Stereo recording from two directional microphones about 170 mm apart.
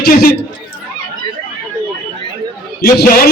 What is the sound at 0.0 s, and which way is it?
Speech, 60° left (ahead or behind).